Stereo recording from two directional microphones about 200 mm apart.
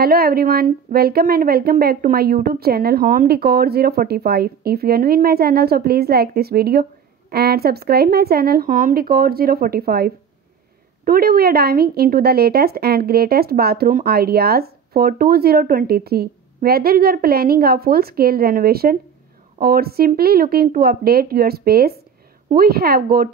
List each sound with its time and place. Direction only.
0.0 s a woman's voice: 50° right (ahead or behind)